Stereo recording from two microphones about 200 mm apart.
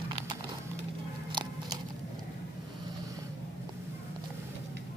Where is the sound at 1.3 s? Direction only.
20° right (ahead or behind).